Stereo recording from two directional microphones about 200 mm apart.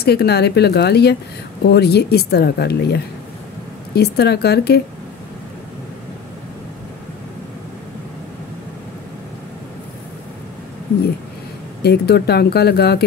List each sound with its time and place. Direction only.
0.0 s speech: 50° left (ahead or behind)
11.8 s speech: 55° left (ahead or behind)